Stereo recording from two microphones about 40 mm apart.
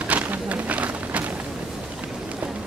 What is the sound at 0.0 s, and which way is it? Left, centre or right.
Run, right.